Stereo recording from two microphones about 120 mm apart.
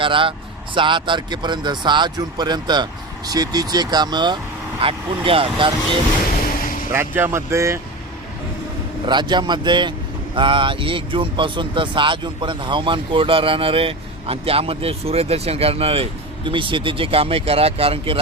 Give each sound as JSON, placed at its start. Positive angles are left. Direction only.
{"t": 0.0, "sound": "speech", "side_deg": -45}
{"t": 4.8, "sound": "speech", "side_deg": -50}
{"t": 6.9, "sound": "speech", "side_deg": -20}
{"t": 9.0, "sound": "speech", "side_deg": -40}